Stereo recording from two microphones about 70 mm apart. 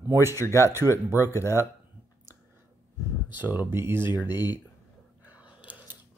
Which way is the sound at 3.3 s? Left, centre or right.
Right.